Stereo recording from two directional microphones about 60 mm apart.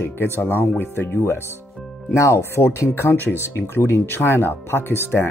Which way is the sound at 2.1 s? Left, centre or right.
Left.